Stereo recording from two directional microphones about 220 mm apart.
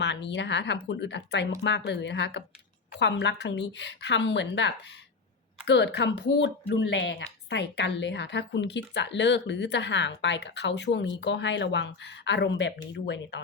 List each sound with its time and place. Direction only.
0.0 s speech: 50° left (ahead or behind)